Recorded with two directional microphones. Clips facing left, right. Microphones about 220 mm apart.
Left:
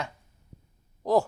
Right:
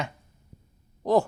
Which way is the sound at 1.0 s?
5° left (ahead or behind).